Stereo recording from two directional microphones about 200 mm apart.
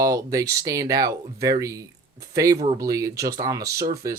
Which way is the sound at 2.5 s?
30° right (ahead or behind).